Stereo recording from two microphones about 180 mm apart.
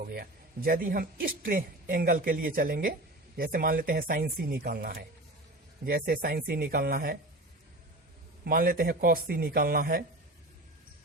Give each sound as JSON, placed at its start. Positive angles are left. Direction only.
{"t": 0.0, "sound": "a man's voice", "side_deg": -55}
{"t": 8.4, "sound": "speech", "side_deg": -55}